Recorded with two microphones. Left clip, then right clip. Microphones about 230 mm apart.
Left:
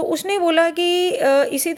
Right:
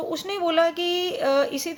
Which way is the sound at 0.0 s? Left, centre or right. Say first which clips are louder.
Left 7 dB; left.